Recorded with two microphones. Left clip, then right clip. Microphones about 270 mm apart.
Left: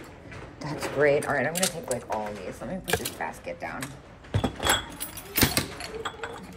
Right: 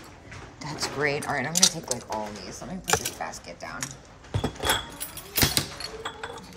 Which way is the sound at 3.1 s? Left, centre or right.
Centre.